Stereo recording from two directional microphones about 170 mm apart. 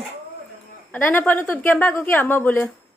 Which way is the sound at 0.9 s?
10° left (ahead or behind).